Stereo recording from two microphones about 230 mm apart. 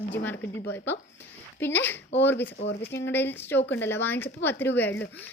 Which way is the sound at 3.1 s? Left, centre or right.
Centre.